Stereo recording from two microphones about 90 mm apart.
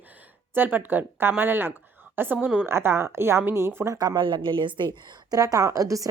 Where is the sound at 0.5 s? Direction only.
20° right (ahead or behind).